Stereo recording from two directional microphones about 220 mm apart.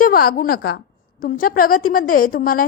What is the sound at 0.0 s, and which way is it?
A woman's voice, 40° left (ahead or behind).